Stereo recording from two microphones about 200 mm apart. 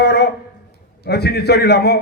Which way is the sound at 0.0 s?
55° left (ahead or behind).